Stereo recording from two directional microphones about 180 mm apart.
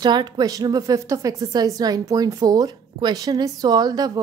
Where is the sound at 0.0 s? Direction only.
25° right (ahead or behind).